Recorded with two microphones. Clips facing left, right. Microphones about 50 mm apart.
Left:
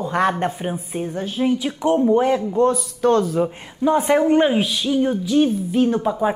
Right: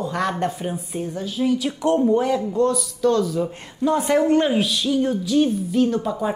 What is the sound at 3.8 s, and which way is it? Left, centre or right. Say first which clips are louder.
A woman's voice: left 2 dB; centre.